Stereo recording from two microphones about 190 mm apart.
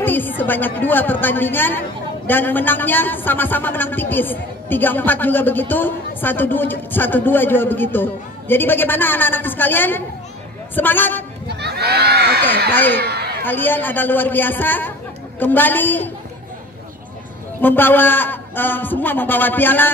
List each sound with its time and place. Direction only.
0.0 s speech: 10° left (ahead or behind)
11.4 s speech: 60° right (ahead or behind)
12.7 s speech: 10° left (ahead or behind)
13.0 s a sound: 60° right (ahead or behind)
13.4 s speech: 10° left (ahead or behind)
17.6 s speech: 10° left (ahead or behind)